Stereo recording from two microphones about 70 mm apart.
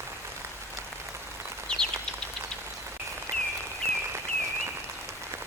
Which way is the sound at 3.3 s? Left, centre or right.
Right.